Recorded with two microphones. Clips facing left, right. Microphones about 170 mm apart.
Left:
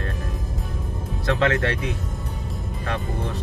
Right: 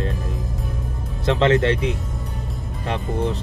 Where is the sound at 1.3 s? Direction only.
25° right (ahead or behind).